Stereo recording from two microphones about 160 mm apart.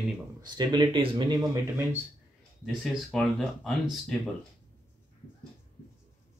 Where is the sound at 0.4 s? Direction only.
25° right (ahead or behind).